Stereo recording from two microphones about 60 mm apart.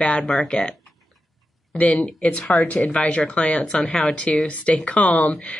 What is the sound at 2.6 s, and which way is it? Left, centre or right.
Speech, left.